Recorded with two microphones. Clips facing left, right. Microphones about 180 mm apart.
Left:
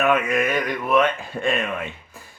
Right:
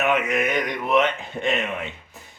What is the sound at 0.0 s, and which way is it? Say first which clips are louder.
Speech: left 2 dB; 20° right (ahead or behind).